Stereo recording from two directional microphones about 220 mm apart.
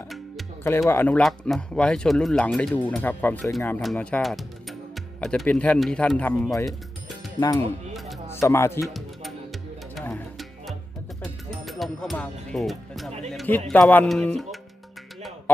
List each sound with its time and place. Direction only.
0.1 s music: centre (ahead or behind)
0.7 s speech: 10° left (ahead or behind)
7.3 s speech: 15° left (ahead or behind)
8.8 s music: centre (ahead or behind)
13.7 s speech: 5° left (ahead or behind)